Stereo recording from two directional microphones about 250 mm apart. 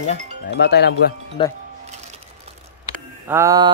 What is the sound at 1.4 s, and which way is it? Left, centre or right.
Speech, centre.